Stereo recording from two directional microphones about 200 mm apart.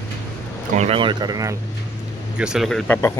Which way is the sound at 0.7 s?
30° right (ahead or behind).